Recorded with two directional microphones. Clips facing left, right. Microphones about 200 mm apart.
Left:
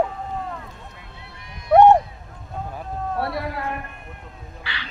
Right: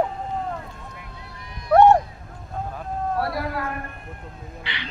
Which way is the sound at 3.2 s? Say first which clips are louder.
Right 1 dB; 25° left (ahead or behind).